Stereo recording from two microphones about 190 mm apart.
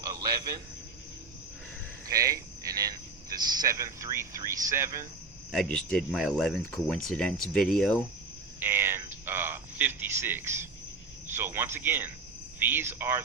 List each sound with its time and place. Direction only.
0.0 s a sound: 20° right (ahead or behind)
2.0 s speech: 20° right (ahead or behind)
5.5 s speech: 5° left (ahead or behind)
8.5 s cricket: 10° right (ahead or behind)
9.2 s speech: 10° right (ahead or behind)